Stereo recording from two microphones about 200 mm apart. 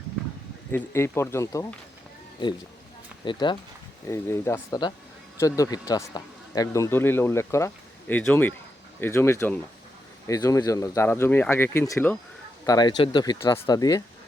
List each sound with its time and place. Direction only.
0.7 s speech: 15° left (ahead or behind)
3.2 s speech: 25° left (ahead or behind)